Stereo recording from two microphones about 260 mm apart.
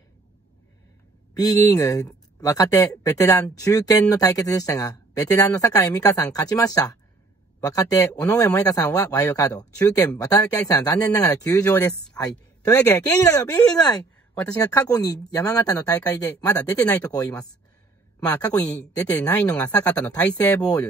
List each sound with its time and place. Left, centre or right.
1.3 s speech: centre